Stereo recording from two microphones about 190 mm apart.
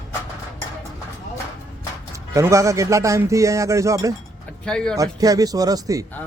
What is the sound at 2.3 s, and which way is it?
Speech, 15° right (ahead or behind).